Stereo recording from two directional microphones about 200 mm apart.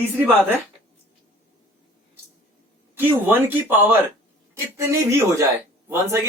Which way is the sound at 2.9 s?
10° right (ahead or behind).